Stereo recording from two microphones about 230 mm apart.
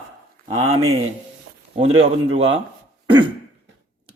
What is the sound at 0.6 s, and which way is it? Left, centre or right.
A man's voice, right.